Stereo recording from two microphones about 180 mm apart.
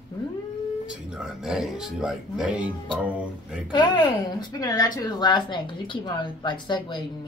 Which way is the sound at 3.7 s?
25° left (ahead or behind).